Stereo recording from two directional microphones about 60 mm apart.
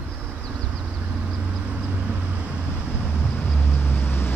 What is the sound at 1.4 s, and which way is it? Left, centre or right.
Vehicle, centre.